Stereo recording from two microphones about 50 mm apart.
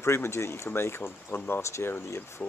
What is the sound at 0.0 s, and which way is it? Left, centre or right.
Speech, left.